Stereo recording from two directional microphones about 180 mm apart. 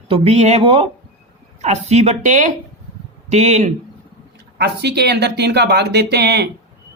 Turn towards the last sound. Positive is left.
turn(degrees=-65)  # may be behind; listen again after turning